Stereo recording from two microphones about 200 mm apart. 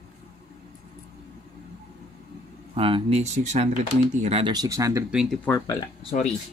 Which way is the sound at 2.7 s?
30° right (ahead or behind).